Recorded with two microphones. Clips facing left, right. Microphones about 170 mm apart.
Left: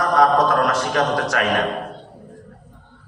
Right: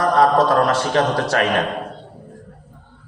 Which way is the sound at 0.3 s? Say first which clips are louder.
Right 2 dB; 30° right (ahead or behind).